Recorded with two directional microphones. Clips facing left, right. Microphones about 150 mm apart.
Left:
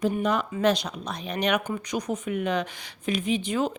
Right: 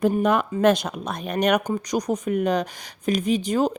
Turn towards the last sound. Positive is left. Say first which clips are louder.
# right 4 dB
turn(degrees=-40)  # may be behind; listen again after turning